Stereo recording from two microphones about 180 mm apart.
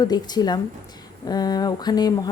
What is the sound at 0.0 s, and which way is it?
A woman's voice, 20° left (ahead or behind).